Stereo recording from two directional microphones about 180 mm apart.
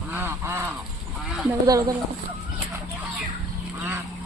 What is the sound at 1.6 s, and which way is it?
Speech, 20° right (ahead or behind).